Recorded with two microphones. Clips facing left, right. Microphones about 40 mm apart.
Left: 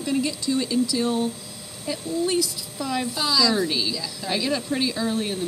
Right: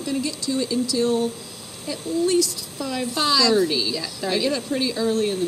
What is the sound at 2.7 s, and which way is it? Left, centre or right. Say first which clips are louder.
Speech: left 1 dB; centre.